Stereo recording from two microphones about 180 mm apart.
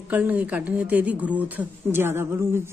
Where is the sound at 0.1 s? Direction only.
10° right (ahead or behind).